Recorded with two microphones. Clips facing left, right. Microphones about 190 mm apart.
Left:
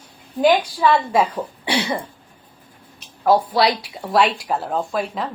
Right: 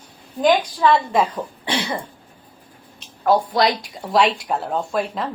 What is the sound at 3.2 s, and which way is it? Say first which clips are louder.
Speech: left 1 dB; 5° left (ahead or behind).